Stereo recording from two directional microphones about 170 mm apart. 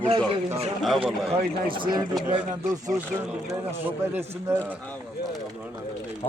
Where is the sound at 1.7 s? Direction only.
25° right (ahead or behind).